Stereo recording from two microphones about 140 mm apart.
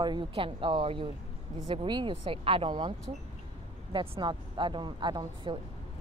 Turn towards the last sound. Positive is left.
turn(degrees=-35)  # may be behind; listen again after turning